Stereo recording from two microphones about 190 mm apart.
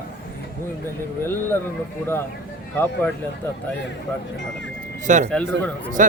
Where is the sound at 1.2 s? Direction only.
10° left (ahead or behind).